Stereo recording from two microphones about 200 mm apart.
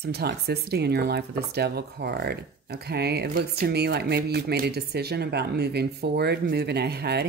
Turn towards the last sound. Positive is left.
turn(degrees=-55)  # may be behind; listen again after turning